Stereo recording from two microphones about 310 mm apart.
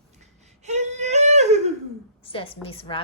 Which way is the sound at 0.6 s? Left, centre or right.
Right.